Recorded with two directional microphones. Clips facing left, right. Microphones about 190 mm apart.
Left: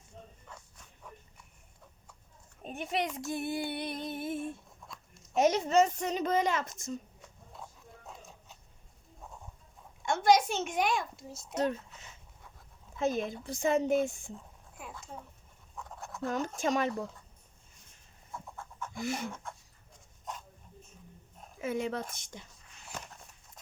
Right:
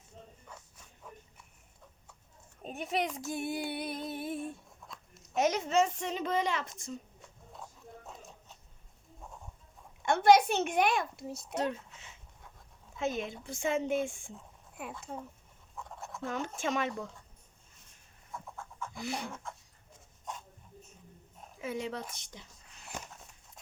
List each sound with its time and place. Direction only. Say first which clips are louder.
0.5 s insect: right 1 dB; 5° right (ahead or behind)
2.6 s speech: even; centre (ahead or behind)
5.4 s speech: left 3 dB; 30° left (ahead or behind)
10.1 s a child's voice: right 2 dB; 60° right (ahead or behind)
11.5 s speech: left 3 dB; 40° left (ahead or behind)
15.7 s fowl: even; centre (ahead or behind)
16.2 s speech: left 3 dB; 40° left (ahead or behind)
18.3 s a sound: even; centre (ahead or behind)
18.9 s speech: left 3 dB; 45° left (ahead or behind)
21.6 s speech: left 3 dB; 50° left (ahead or behind)